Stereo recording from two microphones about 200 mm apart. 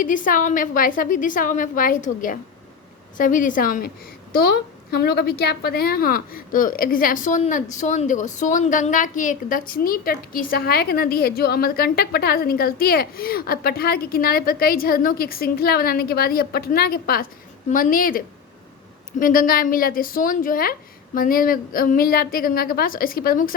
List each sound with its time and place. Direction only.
0.0 s a woman's voice: 40° left (ahead or behind)
19.2 s a woman's voice: 45° left (ahead or behind)